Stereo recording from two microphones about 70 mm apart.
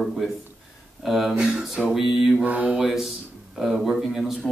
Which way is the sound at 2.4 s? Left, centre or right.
Right.